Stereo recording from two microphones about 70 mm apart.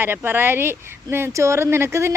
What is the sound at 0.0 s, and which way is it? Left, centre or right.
Speech, right.